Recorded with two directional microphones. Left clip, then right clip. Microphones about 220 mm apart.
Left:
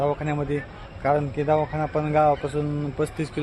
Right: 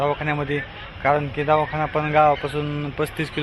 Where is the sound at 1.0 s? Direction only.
5° left (ahead or behind).